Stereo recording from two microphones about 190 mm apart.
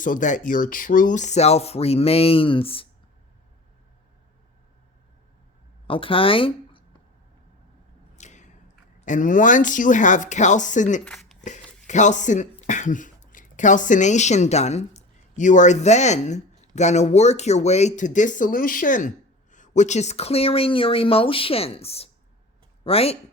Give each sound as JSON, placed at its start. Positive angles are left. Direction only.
{"t": 0.0, "sound": "speech", "side_deg": 45}
{"t": 5.9, "sound": "speech", "side_deg": 30}
{"t": 8.1, "sound": "a sound", "side_deg": 40}
{"t": 9.0, "sound": "speech", "side_deg": 40}
{"t": 11.0, "sound": "speech", "side_deg": 5}
{"t": 11.4, "sound": "speech", "side_deg": 40}